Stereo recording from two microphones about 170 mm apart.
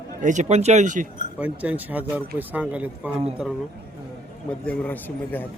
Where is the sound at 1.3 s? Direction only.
5° right (ahead or behind).